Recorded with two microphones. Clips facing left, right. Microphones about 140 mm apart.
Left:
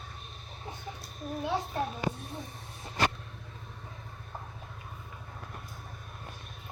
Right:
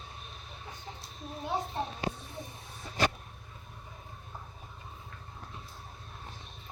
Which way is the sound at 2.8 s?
50° left (ahead or behind).